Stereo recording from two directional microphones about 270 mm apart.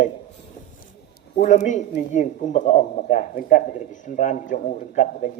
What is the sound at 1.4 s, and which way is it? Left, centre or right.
Speech, left.